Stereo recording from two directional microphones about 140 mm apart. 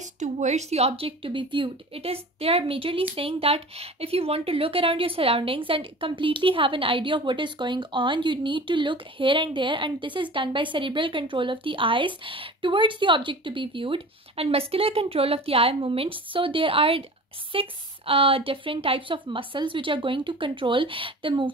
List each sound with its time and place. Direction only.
0.2 s speech: 55° right (ahead or behind); by 21.5 s 40° right (ahead or behind)